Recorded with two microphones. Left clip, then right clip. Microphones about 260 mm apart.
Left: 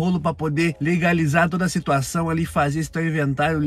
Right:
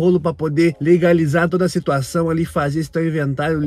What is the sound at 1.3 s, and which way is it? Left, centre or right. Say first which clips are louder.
A man's voice: right 3 dB; left.